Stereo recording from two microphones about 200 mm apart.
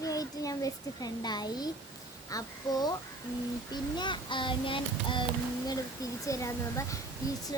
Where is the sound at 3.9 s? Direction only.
25° left (ahead or behind).